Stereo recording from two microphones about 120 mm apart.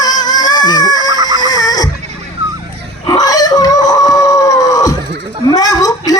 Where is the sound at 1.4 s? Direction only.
30° left (ahead or behind).